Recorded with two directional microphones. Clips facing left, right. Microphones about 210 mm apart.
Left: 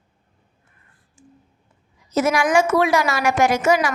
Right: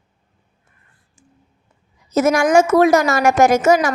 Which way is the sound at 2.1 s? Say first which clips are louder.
Right 4 dB; 45° right (ahead or behind).